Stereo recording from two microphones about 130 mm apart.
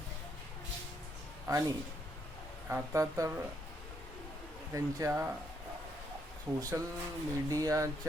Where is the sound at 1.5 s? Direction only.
25° right (ahead or behind).